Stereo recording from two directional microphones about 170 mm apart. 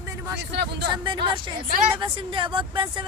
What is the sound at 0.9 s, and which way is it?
Speech, 25° right (ahead or behind).